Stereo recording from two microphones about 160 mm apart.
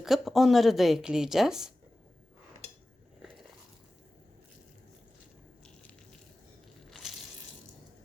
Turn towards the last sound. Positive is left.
turn(degrees=0)  # may be behind; listen again after turning